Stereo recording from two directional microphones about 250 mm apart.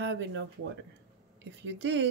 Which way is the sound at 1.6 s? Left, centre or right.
Right.